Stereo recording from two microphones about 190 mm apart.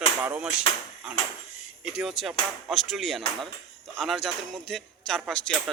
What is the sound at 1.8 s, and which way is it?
Speech, 5° right (ahead or behind).